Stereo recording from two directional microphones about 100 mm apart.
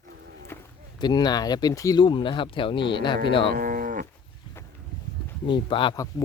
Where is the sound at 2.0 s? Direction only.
55° left (ahead or behind).